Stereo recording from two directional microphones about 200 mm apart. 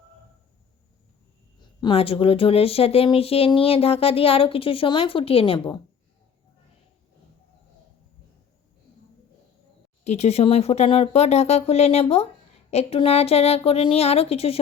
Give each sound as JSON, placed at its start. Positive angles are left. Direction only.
{"t": 1.5, "sound": "speech", "side_deg": 25}
{"t": 10.0, "sound": "speech", "side_deg": 35}